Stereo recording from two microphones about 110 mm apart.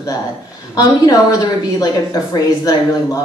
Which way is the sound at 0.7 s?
35° left (ahead or behind).